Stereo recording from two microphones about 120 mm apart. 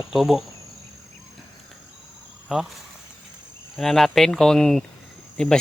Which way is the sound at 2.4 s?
5° right (ahead or behind).